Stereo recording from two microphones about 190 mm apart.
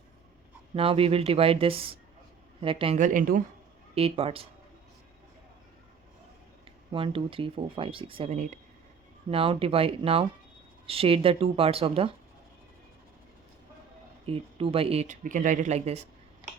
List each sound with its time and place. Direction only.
0.7 s speech: 30° right (ahead or behind)
3.0 s speech: 45° right (ahead or behind)
3.9 s speech: 30° right (ahead or behind)
6.9 s speech: 25° right (ahead or behind)
14.3 s speech: 30° right (ahead or behind)